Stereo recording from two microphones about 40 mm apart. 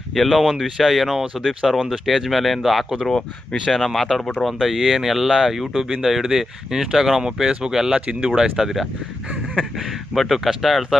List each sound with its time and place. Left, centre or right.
0.1 s speech: centre
3.1 s speech: centre
7.9 s speech: right
8.5 s speech: centre